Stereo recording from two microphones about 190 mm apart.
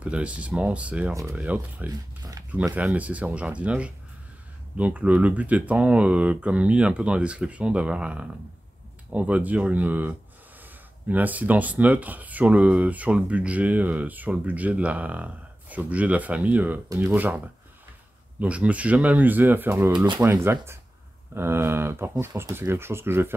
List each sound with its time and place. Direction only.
0.0 s speech: 5° right (ahead or behind)
1.9 s speech: 20° right (ahead or behind)
2.6 s speech: 10° right (ahead or behind)
18.4 s speech: 5° right (ahead or behind)
19.9 s speech: 25° right (ahead or behind)
20.4 s speech: 15° right (ahead or behind)